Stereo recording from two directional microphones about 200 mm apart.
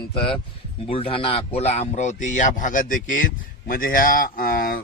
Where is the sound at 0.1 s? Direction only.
25° left (ahead or behind).